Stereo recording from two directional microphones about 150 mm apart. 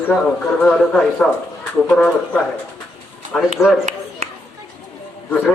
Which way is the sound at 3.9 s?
45° right (ahead or behind).